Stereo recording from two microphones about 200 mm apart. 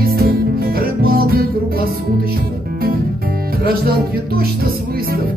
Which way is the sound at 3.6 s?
50° right (ahead or behind).